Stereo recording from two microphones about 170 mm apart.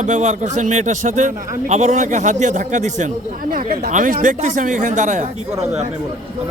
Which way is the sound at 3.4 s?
60° right (ahead or behind).